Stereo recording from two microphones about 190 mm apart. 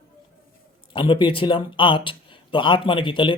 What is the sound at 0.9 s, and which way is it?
Speech, 25° left (ahead or behind).